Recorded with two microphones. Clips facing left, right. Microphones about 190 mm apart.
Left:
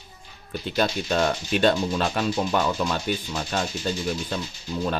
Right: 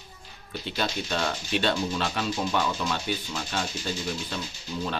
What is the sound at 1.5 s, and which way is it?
Speech, 45° left (ahead or behind).